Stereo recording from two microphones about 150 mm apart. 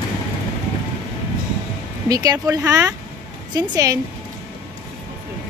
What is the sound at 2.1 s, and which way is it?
Speech, 25° right (ahead or behind).